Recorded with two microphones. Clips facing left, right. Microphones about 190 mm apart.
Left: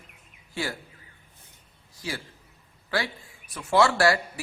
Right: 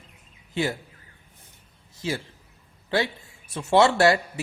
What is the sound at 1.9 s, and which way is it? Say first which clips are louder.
Speech: right 6 dB; 25° right (ahead or behind).